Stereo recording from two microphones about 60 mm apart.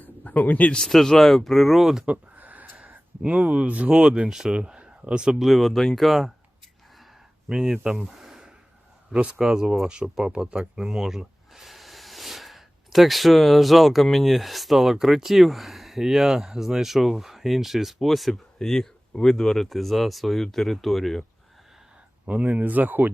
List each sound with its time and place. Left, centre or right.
0.0 s a sound: left
0.9 s speech: centre
2.0 s a sound: right
3.4 s speech: centre
5.4 s speech: centre
7.4 s speech: centre
8.0 s a sound: centre
9.4 s speech: centre
22.3 s speech: right